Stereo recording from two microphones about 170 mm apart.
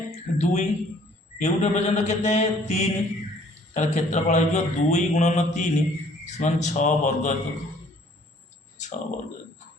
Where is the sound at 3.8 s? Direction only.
40° left (ahead or behind).